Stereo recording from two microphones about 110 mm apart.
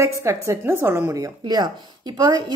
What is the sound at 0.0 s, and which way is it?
A woman's voice, 25° right (ahead or behind).